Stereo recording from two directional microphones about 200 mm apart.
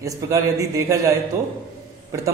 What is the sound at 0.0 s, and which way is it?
A man's voice, 15° right (ahead or behind).